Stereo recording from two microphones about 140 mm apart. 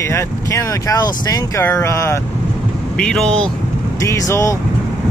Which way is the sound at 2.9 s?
5° left (ahead or behind).